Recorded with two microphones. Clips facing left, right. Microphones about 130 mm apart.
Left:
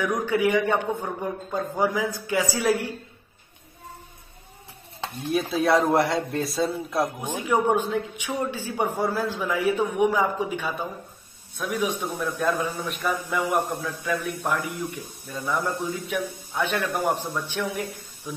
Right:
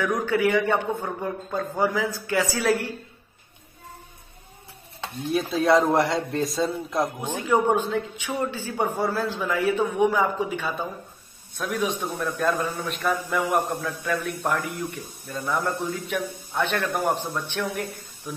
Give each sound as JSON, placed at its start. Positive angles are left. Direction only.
{"t": 0.0, "sound": "a man's voice", "side_deg": 15}
{"t": 5.3, "sound": "a man's voice", "side_deg": 5}